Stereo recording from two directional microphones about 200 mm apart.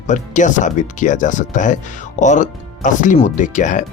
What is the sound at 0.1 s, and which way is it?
Speech, 40° left (ahead or behind).